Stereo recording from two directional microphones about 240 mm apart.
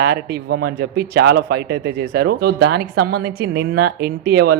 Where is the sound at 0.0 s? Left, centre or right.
Right.